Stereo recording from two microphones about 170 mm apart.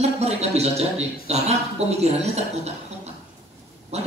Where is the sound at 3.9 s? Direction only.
40° right (ahead or behind).